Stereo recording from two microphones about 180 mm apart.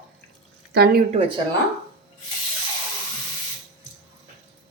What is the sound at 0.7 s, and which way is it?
Speech, 60° right (ahead or behind).